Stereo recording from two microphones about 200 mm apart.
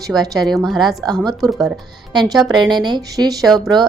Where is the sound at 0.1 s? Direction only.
20° right (ahead or behind).